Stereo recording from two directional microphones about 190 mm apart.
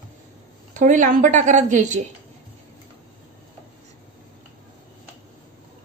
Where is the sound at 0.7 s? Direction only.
40° right (ahead or behind).